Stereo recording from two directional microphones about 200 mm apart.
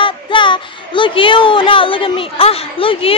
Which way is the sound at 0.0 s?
25° left (ahead or behind).